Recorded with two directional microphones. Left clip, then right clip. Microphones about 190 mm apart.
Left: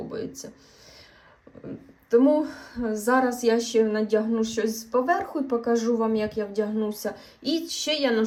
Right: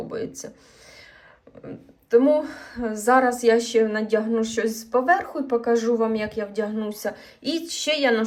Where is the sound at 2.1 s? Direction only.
35° left (ahead or behind).